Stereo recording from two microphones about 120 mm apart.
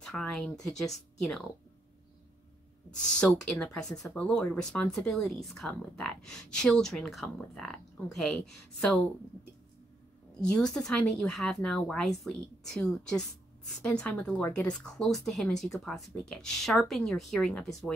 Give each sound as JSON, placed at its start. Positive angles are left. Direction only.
{"t": 0.0, "sound": "speech", "side_deg": 5}
{"t": 2.9, "sound": "speech", "side_deg": 5}
{"t": 10.4, "sound": "speech", "side_deg": 5}